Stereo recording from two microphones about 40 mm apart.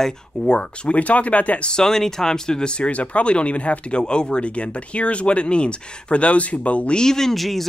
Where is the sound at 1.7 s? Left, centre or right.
Centre; by 7.0 s left.